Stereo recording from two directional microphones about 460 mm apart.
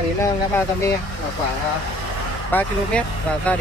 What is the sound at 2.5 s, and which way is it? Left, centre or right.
Speech, centre.